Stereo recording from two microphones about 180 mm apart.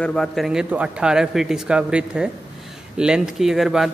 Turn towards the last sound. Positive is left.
turn(degrees=0)  # may be behind; listen again after turning